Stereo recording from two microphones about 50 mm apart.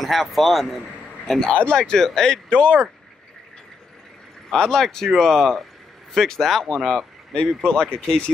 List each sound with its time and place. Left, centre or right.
0.0 s speech: centre
1.5 s speech: left
1.8 s speech: centre
4.6 s speech: centre
7.6 s speech: left